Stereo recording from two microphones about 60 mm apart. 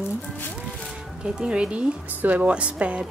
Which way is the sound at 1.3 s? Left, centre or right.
Centre.